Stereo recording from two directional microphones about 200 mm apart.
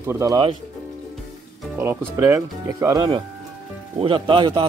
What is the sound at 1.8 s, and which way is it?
A man's voice, 15° right (ahead or behind).